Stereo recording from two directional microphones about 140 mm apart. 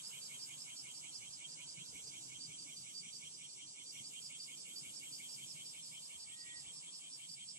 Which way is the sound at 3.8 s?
20° right (ahead or behind).